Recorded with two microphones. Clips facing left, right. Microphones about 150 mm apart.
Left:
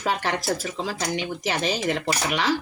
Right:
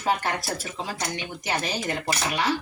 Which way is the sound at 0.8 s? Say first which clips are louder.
Left 4 dB; 90° left.